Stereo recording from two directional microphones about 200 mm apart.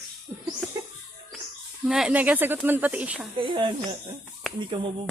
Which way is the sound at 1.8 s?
5° right (ahead or behind).